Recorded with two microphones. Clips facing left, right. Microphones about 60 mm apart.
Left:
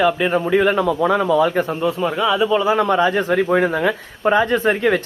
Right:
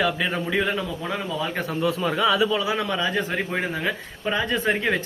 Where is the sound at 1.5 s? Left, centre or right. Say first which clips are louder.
Left 6 dB; left.